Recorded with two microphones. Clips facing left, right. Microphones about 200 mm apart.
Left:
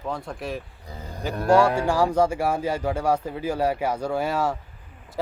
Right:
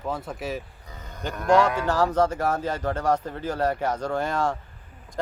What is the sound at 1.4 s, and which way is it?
Speech, 10° left (ahead or behind).